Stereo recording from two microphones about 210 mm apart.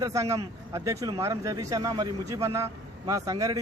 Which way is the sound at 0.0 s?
15° right (ahead or behind).